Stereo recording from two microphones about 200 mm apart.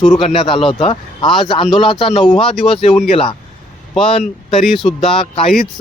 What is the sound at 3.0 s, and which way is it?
Speech, 30° left (ahead or behind).